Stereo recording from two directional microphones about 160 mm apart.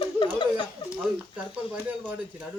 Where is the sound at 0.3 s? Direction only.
30° left (ahead or behind).